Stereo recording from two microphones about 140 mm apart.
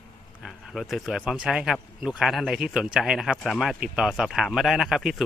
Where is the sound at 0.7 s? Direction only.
Centre (ahead or behind).